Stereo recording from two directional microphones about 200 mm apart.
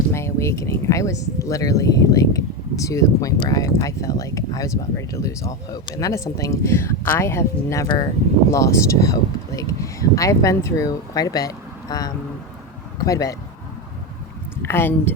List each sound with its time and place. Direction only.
0.1 s speech: 15° left (ahead or behind)
14.6 s speech: 10° left (ahead or behind)